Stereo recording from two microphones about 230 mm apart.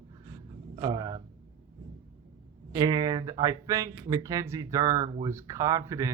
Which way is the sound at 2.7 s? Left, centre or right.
Centre.